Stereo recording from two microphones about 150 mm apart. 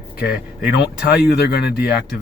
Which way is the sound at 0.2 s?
90° left.